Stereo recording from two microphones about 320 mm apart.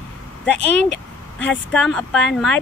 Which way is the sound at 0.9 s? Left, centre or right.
Centre.